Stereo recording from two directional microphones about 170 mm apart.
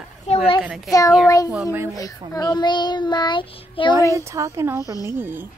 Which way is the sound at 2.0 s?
20° left (ahead or behind).